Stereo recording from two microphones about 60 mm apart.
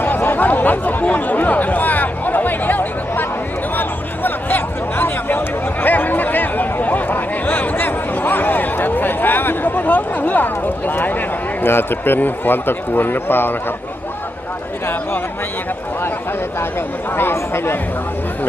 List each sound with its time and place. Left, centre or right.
0.0 s chatter: left
5.8 s a sound: left
11.6 s a man's voice: left
17.2 s a man's voice: left